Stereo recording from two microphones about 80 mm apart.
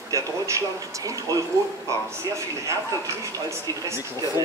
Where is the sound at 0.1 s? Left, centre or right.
Right.